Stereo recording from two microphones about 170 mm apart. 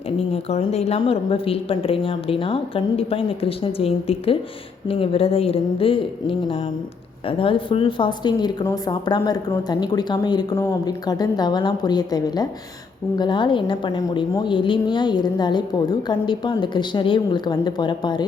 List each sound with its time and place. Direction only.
0.4 s speech: 40° left (ahead or behind)